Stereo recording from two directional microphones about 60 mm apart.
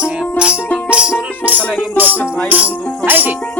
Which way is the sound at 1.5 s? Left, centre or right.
Right.